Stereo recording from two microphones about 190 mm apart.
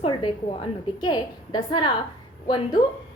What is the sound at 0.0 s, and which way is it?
A woman's voice, 25° left (ahead or behind).